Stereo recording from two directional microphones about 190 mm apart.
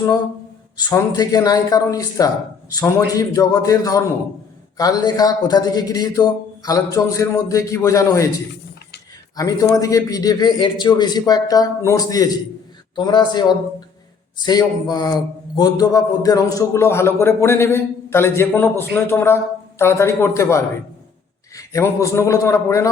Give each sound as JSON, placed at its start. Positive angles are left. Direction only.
{"t": 0.9, "sound": "a man's voice", "side_deg": 20}
{"t": 9.3, "sound": "a man's voice", "side_deg": 20}